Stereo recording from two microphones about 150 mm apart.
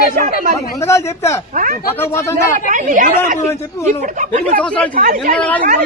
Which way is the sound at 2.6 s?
60° right (ahead or behind).